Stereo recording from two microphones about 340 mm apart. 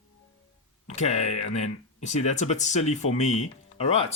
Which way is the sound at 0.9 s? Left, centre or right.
Centre.